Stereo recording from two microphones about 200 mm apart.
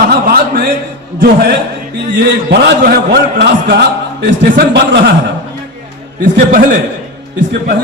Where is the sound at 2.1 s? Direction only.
55° right (ahead or behind).